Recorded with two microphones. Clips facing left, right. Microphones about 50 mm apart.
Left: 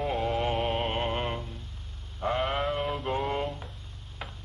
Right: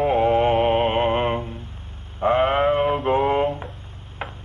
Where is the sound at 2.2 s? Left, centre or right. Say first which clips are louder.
Right 10 dB; right.